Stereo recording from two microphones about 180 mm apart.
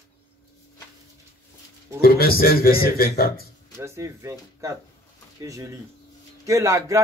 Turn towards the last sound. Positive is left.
turn(degrees=-15)  # may be behind; listen again after turning